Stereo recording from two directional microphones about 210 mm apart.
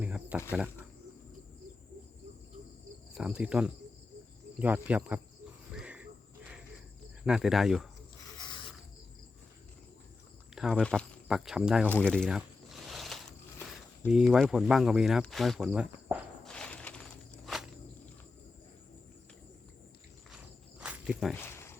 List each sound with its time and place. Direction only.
0.0 s insect: 5° right (ahead or behind)
3.2 s speech: 5° right (ahead or behind)
5.7 s cricket: 5° right (ahead or behind)
7.3 s speech: 5° right (ahead or behind)
8.4 s rub: 20° left (ahead or behind)
10.5 s speech: centre (ahead or behind)
11.9 s a sound: 5° left (ahead or behind)
14.1 s speech: centre (ahead or behind)
16.5 s a sound: 5° left (ahead or behind)
20.3 s walk: 5° right (ahead or behind)
21.4 s a sound: 10° left (ahead or behind)